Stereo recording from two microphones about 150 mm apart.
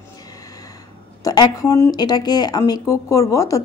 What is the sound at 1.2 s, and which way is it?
A woman's voice, 25° left (ahead or behind).